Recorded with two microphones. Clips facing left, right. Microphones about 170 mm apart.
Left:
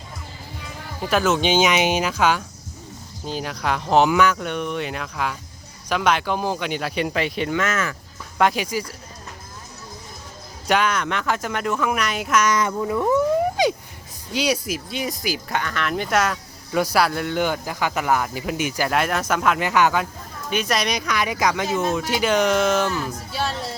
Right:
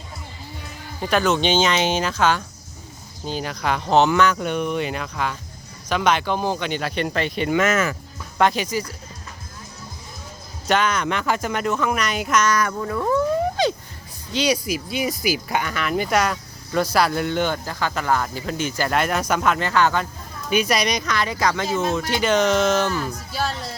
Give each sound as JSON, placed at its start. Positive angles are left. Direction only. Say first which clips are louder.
{"t": 1.0, "sound": "speech", "louder": "even", "side_deg": 5}
{"t": 7.5, "sound": "speech", "louder": "right 8 dB", "side_deg": -10}
{"t": 8.4, "sound": "speech", "louder": "right 1 dB", "side_deg": 5}
{"t": 10.7, "sound": "speech", "louder": "even", "side_deg": 5}
{"t": 12.5, "sound": "speech", "louder": "left 1 dB", "side_deg": 20}
{"t": 20.5, "sound": "speech", "louder": "right 2 dB", "side_deg": 0}
{"t": 21.7, "sound": "speech", "louder": "even", "side_deg": 0}